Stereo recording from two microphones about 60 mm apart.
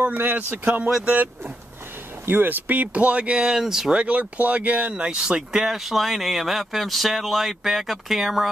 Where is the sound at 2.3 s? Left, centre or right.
Right; by 5.7 s centre.